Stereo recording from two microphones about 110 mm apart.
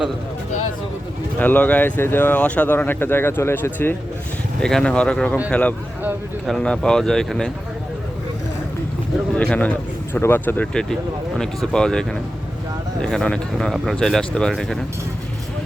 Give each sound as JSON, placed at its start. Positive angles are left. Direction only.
{"t": 1.4, "sound": "speech", "side_deg": 15}
{"t": 4.6, "sound": "speech", "side_deg": 5}
{"t": 9.3, "sound": "speech", "side_deg": 10}